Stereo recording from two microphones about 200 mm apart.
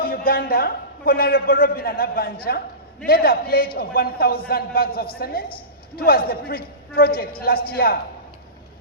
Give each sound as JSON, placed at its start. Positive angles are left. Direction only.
{"t": 0.0, "sound": "a man's voice", "side_deg": 50}